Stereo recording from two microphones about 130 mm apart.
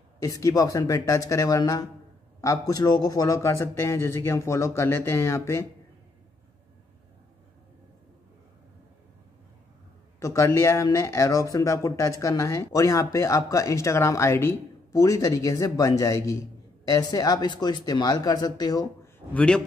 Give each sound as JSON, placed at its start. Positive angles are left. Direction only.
{"t": 0.2, "sound": "speech", "side_deg": 25}
{"t": 10.2, "sound": "speech", "side_deg": 25}
{"t": 19.3, "sound": "a man's voice", "side_deg": 5}